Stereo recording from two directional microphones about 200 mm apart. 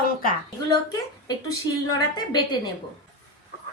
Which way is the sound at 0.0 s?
45° left (ahead or behind).